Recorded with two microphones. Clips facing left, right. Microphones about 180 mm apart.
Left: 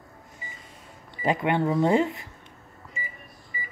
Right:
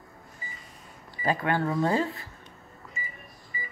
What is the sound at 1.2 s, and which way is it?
Speech, 20° left (ahead or behind).